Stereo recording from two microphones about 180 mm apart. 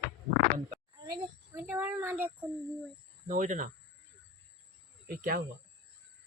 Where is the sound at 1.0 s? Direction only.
20° right (ahead or behind).